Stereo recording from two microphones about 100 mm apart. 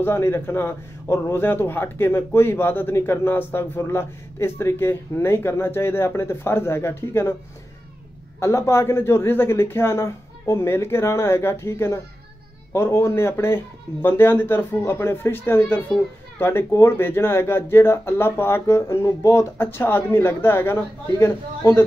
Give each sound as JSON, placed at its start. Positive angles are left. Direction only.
{"t": 0.0, "sound": "a man's voice", "side_deg": 20}
{"t": 8.4, "sound": "a man's voice", "side_deg": 30}